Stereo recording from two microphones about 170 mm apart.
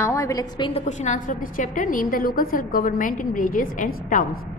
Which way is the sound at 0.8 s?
45° left (ahead or behind).